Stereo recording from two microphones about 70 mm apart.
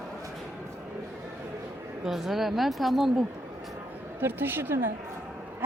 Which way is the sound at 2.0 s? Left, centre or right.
Centre.